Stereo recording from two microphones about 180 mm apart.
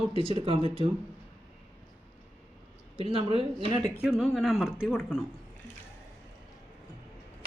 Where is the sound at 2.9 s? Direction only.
30° right (ahead or behind).